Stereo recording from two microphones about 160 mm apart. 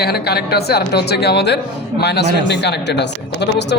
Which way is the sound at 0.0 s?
80° left.